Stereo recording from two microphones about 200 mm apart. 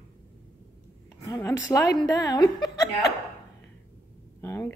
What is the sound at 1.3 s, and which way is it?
A woman's voice, 15° left (ahead or behind).